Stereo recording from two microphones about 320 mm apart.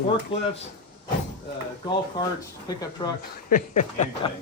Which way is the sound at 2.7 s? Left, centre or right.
Centre.